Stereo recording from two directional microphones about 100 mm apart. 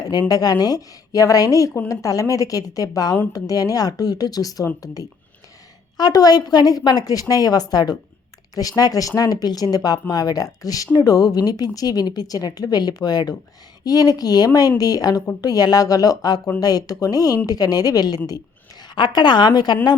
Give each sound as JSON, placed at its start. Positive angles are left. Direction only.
{"t": 0.1, "sound": "a woman's voice", "side_deg": 40}